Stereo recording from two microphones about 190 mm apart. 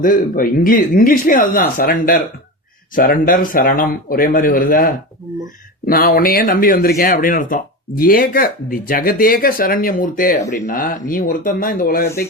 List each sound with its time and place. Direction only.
0.0 s speech: 45° left (ahead or behind)